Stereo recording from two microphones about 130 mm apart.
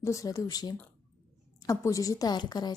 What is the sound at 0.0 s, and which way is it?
A woman's voice, 25° left (ahead or behind).